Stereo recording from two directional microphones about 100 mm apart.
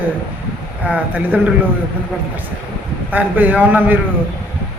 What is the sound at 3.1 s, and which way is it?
Speech, 15° right (ahead or behind).